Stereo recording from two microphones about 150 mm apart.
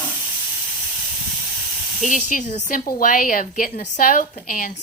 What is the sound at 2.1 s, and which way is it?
A woman's voice, 60° left (ahead or behind).